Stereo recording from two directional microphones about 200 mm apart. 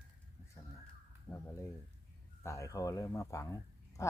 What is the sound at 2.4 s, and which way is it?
Speech, 15° left (ahead or behind).